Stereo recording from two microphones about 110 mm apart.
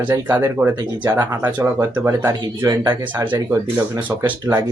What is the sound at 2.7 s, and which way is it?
Speech, 40° right (ahead or behind).